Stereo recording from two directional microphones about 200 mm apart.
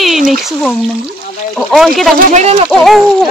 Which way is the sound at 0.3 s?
Centre (ahead or behind).